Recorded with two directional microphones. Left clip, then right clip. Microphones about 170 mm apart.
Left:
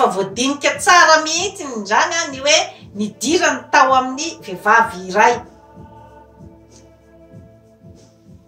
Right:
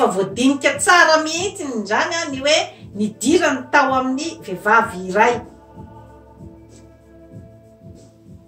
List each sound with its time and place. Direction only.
0.1 s a woman's voice: 10° right (ahead or behind)